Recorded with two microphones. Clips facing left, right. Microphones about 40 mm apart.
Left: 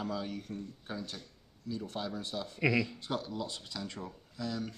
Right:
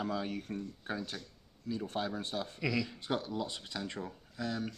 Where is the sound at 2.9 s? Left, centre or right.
Centre.